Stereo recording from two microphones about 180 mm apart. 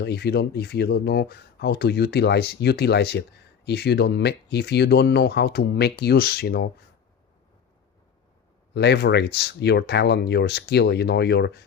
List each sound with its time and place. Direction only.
0.0 s speech: 65° left (ahead or behind)
8.7 s speech: 70° left (ahead or behind)